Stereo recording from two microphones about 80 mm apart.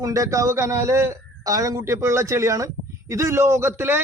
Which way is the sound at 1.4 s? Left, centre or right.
Right.